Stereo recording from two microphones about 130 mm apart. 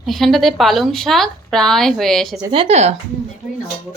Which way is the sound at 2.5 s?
40° right (ahead or behind).